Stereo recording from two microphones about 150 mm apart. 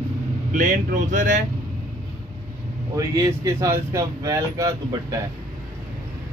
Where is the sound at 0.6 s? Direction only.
60° right (ahead or behind).